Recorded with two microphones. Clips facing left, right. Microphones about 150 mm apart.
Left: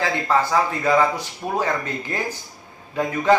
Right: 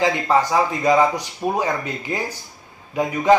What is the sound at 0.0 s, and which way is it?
A man's voice, 15° right (ahead or behind).